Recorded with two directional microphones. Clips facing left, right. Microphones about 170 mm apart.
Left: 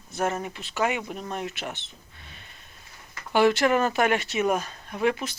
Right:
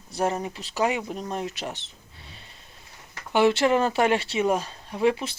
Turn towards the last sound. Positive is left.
turn(degrees=-30)  # may be behind; listen again after turning